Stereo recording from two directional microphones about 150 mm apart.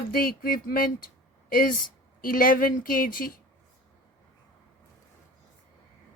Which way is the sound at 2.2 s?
65° left (ahead or behind).